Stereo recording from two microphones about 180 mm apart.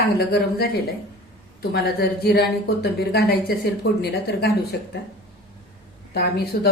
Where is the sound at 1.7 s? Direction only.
60° left (ahead or behind).